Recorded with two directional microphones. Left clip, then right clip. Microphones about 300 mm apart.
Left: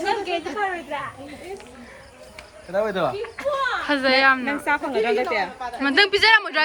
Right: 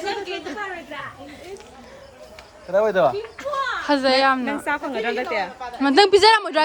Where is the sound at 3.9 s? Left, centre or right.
Centre.